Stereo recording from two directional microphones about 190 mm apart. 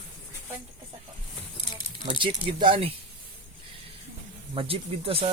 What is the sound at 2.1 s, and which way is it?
Speech, 25° right (ahead or behind).